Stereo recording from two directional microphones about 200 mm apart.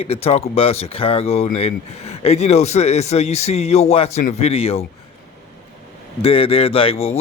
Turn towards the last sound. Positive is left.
turn(degrees=30)  # may be behind; listen again after turning